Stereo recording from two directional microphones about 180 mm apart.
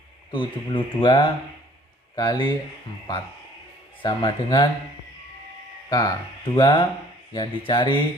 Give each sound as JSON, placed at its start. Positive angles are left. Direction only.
{"t": 0.3, "sound": "speech", "side_deg": 25}
{"t": 4.0, "sound": "speech", "side_deg": 25}
{"t": 5.9, "sound": "speech", "side_deg": 20}